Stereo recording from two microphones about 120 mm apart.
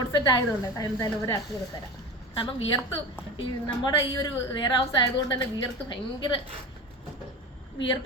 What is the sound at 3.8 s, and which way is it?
A woman's voice, 40° left (ahead or behind).